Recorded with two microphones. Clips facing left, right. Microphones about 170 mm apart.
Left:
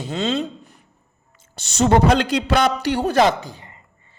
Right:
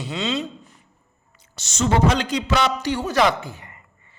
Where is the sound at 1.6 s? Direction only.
60° left (ahead or behind).